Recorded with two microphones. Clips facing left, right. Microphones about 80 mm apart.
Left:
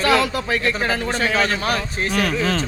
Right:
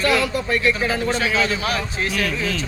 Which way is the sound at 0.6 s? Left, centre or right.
Left.